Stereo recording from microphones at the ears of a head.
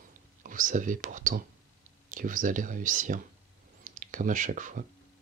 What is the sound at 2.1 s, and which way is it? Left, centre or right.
Speech, right.